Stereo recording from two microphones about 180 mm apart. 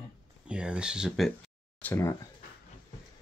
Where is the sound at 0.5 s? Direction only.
5° right (ahead or behind).